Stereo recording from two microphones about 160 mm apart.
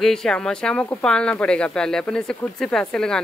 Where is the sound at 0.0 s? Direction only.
5° left (ahead or behind).